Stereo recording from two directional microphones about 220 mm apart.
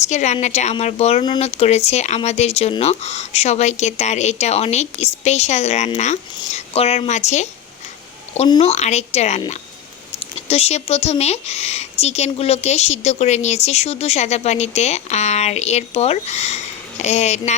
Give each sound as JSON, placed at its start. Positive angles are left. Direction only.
{"t": 0.0, "sound": "a woman's voice", "side_deg": 30}